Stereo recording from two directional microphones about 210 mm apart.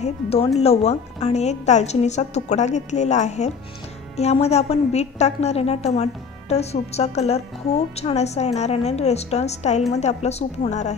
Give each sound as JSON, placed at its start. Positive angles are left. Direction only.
{"t": 0.0, "sound": "a woman's voice", "side_deg": 30}